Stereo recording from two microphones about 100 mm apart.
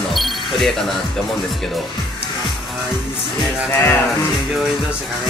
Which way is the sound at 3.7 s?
25° left (ahead or behind).